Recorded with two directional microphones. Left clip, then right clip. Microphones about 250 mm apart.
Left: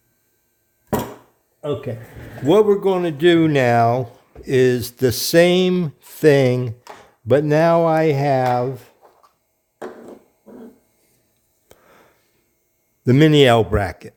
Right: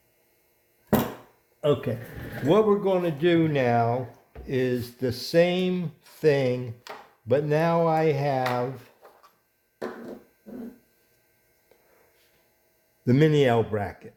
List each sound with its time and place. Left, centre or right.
2.5 s speech: left
11.7 s a sound: left
13.1 s speech: left